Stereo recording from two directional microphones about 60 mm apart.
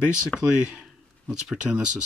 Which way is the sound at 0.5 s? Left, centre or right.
Centre.